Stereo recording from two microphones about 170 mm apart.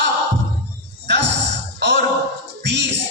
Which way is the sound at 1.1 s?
90° right.